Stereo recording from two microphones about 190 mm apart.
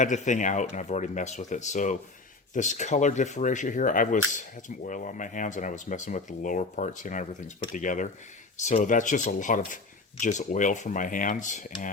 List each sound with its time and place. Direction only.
0.0 s speech: 40° left (ahead or behind)